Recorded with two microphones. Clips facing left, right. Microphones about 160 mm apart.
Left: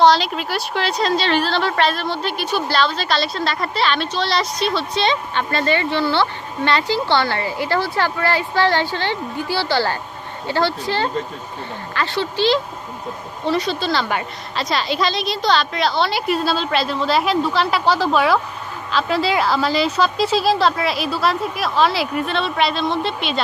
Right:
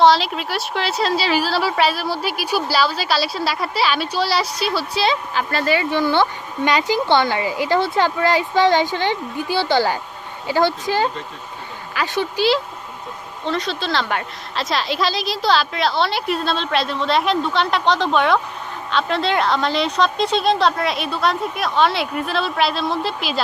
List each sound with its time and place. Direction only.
0.0 s speech: centre (ahead or behind)
13.4 s a woman's voice: 5° left (ahead or behind)